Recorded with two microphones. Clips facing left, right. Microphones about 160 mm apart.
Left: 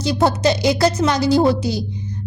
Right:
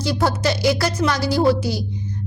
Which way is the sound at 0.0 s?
20° left (ahead or behind).